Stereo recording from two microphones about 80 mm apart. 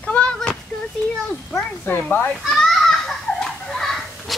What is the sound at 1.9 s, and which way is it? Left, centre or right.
Speech, left.